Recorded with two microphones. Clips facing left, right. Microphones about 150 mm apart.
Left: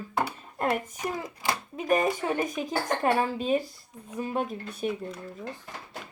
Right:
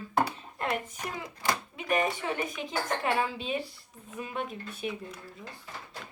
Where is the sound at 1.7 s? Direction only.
40° left (ahead or behind).